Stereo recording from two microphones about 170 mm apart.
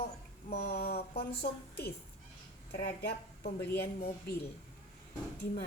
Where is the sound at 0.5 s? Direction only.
65° left (ahead or behind).